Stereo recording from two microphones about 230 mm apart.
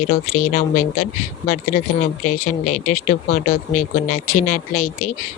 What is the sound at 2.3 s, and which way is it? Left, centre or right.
Speech, left.